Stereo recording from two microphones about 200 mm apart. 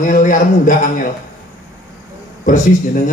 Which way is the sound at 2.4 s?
40° left (ahead or behind).